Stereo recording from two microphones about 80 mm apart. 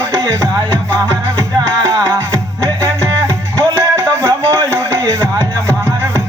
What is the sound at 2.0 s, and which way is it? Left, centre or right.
Music, right.